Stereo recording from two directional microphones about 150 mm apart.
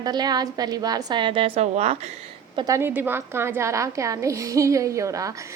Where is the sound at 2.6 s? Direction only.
20° right (ahead or behind).